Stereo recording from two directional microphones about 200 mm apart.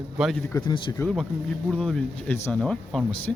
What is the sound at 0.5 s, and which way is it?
Speech, 20° left (ahead or behind).